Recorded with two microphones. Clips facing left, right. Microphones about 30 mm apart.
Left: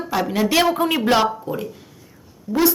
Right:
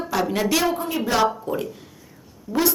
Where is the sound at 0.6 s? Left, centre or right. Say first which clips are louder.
Left 5 dB; left.